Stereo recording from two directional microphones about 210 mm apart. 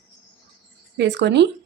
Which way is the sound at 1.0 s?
55° right (ahead or behind).